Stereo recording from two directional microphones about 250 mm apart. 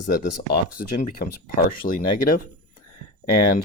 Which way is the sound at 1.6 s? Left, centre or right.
Left.